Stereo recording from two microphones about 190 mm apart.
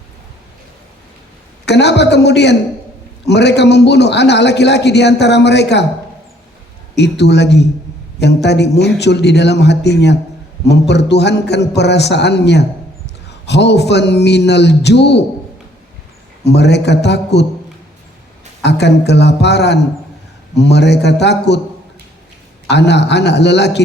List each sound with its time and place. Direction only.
1.6 s a man's voice: 65° left (ahead or behind)
6.9 s a man's voice: 65° left (ahead or behind)
16.4 s a man's voice: 60° left (ahead or behind)
18.6 s a man's voice: 65° left (ahead or behind)
22.7 s a man's voice: 65° left (ahead or behind)